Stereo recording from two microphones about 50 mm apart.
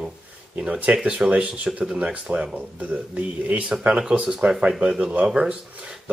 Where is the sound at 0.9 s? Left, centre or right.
Centre.